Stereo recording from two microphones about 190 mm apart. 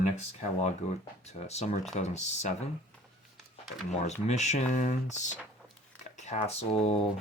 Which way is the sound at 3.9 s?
35° left (ahead or behind).